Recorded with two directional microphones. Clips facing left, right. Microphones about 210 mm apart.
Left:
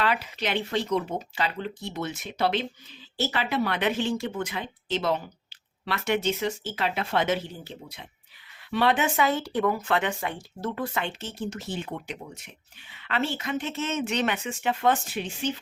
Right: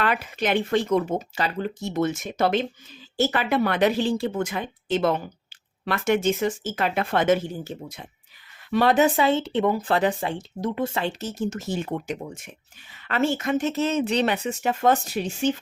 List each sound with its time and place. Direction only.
0.0 s speech: 50° right (ahead or behind); by 4.3 s 35° right (ahead or behind)
4.4 s a woman's voice: 50° right (ahead or behind); by 10.4 s 30° right (ahead or behind)
10.6 s a woman's voice: 20° right (ahead or behind); by 15.5 s 45° right (ahead or behind)